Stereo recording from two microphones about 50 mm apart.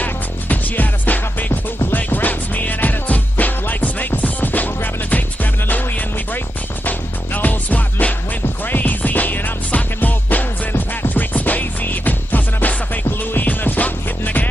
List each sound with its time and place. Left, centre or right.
0.0 s music: left